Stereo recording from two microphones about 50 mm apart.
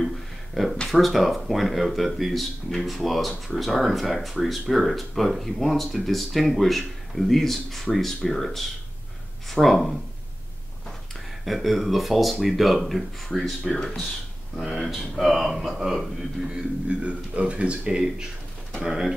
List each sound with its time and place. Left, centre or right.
0.8 s speech: centre
11.4 s speech: centre
14.6 s speech: centre
16.4 s speech: right
18.8 s speech: centre